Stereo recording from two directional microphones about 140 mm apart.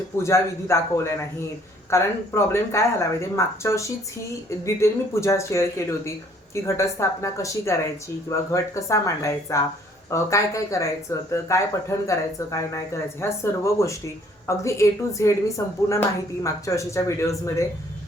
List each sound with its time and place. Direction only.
0.2 s speech: 20° left (ahead or behind)